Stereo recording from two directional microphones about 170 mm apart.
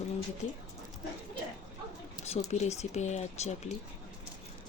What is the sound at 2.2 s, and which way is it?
A woman's voice, 40° left (ahead or behind).